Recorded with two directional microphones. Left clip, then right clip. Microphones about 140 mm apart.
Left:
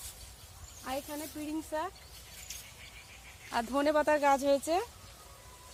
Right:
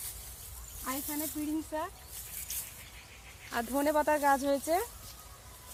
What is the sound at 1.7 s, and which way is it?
Speech, 90° left.